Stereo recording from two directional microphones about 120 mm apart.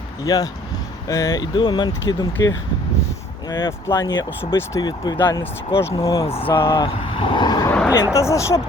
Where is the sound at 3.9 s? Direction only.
35° left (ahead or behind).